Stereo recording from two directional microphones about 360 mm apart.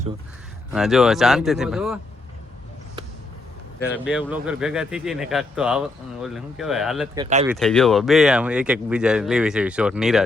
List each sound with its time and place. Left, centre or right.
0.7 s speech: centre
3.8 s speech: centre
7.2 s speech: centre
7.4 s speech: centre